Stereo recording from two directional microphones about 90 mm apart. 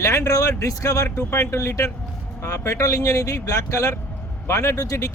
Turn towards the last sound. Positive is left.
turn(degrees=40)  # may be behind; listen again after turning